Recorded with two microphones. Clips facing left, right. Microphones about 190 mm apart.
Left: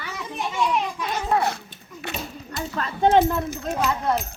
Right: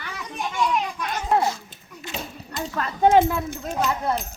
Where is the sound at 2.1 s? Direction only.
65° left (ahead or behind).